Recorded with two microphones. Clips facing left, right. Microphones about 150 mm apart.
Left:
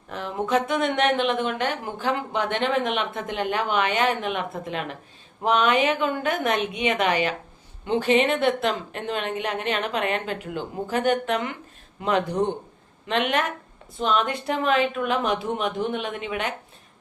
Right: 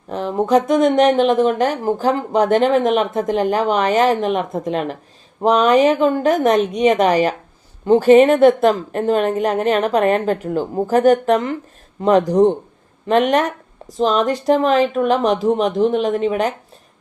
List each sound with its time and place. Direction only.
0.1 s speech: 35° right (ahead or behind)